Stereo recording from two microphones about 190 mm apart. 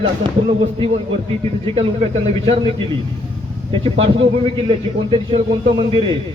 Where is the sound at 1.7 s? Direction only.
30° right (ahead or behind).